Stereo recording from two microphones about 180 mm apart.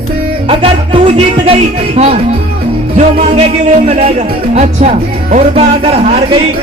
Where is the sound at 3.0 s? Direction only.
40° right (ahead or behind).